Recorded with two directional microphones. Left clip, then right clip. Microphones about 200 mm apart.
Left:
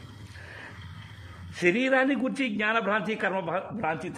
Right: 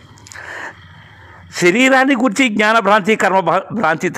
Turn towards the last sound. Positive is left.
turn(degrees=-50)  # may be behind; listen again after turning